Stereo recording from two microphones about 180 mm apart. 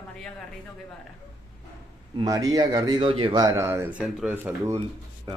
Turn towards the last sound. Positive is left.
turn(degrees=-10)  # may be behind; listen again after turning